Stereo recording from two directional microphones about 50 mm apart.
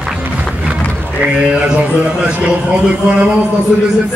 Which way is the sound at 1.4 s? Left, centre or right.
Right.